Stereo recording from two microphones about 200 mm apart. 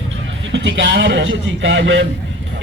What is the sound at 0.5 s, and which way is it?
Speech, 65° right (ahead or behind).